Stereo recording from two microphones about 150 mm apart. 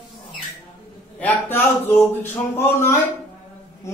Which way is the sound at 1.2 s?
15° left (ahead or behind).